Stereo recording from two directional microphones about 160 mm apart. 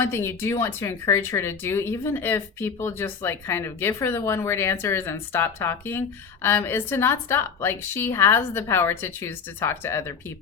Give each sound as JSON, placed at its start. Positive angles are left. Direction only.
{"t": 0.0, "sound": "speech", "side_deg": 15}